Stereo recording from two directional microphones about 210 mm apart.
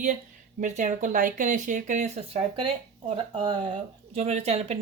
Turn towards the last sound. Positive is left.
turn(degrees=-30)  # may be behind; listen again after turning